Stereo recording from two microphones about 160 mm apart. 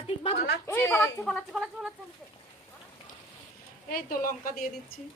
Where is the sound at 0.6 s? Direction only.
15° left (ahead or behind).